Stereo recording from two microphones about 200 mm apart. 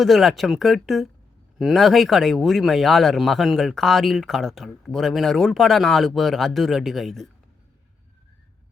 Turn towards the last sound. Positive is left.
turn(degrees=0)  # may be behind; listen again after turning